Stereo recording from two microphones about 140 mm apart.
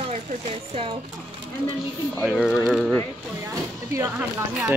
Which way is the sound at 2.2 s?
Centre (ahead or behind).